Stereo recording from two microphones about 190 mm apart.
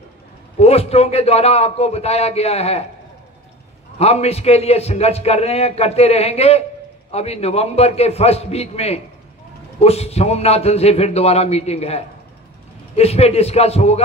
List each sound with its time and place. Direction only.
0.6 s a man's voice: 35° left (ahead or behind)
4.0 s a man's voice: 35° left (ahead or behind)